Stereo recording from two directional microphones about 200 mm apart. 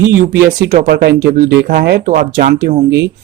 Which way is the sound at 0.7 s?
50° right (ahead or behind).